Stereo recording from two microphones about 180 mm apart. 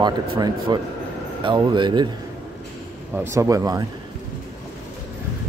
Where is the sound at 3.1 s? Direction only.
15° right (ahead or behind).